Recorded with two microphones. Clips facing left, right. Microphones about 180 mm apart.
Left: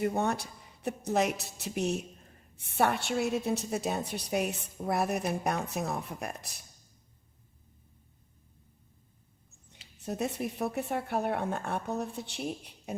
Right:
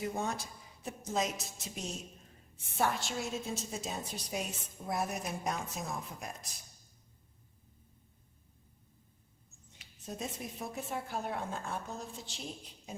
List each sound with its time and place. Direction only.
0.0 s a woman's voice: 60° left (ahead or behind)
10.0 s a woman's voice: 65° left (ahead or behind)